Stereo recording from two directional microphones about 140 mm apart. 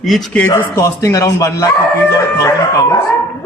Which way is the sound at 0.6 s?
20° left (ahead or behind).